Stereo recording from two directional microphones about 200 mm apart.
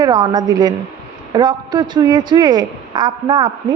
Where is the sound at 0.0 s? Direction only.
20° right (ahead or behind).